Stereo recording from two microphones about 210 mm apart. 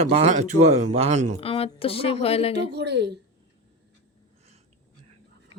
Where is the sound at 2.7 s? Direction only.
55° right (ahead or behind).